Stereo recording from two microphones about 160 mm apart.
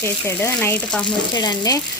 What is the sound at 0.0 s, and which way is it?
Frying, 15° left (ahead or behind).